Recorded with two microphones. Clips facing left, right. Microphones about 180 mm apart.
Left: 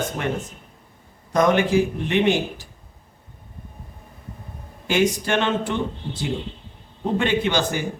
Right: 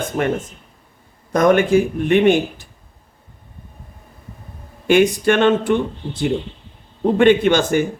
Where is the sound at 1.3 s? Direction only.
55° right (ahead or behind).